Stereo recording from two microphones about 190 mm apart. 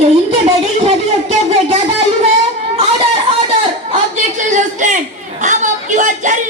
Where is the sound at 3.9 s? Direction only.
40° right (ahead or behind).